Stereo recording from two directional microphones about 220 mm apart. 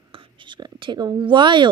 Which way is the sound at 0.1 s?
25° right (ahead or behind).